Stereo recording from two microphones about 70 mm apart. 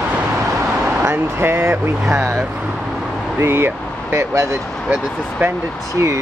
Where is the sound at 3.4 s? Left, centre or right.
Right.